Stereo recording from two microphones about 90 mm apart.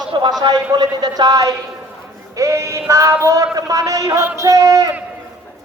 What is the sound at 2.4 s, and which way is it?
Speech, 35° right (ahead or behind).